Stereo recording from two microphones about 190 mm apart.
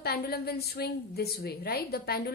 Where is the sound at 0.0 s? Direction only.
55° left (ahead or behind).